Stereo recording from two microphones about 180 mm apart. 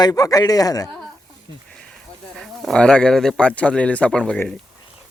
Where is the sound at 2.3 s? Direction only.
5° left (ahead or behind).